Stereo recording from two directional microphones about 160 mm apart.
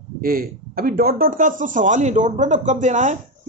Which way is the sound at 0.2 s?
65° right (ahead or behind).